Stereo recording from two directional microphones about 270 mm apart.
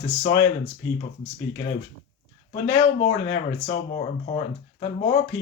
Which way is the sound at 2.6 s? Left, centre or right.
Left.